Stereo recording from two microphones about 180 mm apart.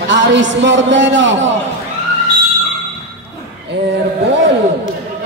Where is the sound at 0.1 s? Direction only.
90° right.